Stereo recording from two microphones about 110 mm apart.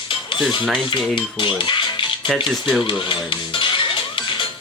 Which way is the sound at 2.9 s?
50° left (ahead or behind).